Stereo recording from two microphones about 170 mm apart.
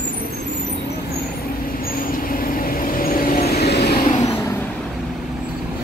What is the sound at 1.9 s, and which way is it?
Vehicle, 55° left (ahead or behind).